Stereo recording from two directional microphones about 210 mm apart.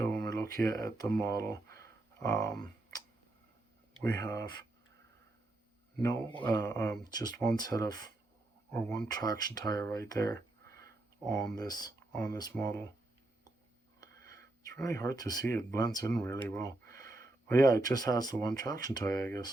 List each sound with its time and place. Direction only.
0.3 s speech: 15° left (ahead or behind)
1.8 s a sound: 15° left (ahead or behind)
4.2 s speech: 15° left (ahead or behind)
6.0 s speech: 15° left (ahead or behind)
14.0 s sniff: 15° left (ahead or behind)
14.8 s speech: 15° left (ahead or behind)